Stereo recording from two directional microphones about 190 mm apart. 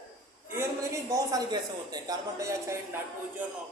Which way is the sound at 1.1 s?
20° right (ahead or behind).